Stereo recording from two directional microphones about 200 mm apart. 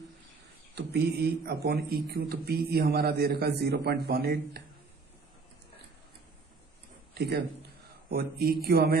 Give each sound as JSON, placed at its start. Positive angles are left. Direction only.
{"t": 0.8, "sound": "a man's voice", "side_deg": -55}
{"t": 7.1, "sound": "a man's voice", "side_deg": -55}